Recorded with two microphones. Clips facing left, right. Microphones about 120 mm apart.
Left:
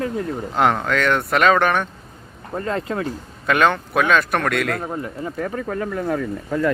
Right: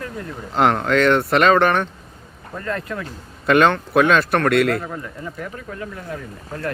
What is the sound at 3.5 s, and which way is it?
Speech, centre (ahead or behind).